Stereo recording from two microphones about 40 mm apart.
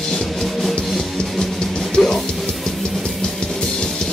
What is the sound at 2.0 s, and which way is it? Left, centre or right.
Music, centre.